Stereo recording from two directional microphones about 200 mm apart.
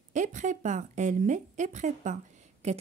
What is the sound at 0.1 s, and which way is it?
Speech, 40° right (ahead or behind).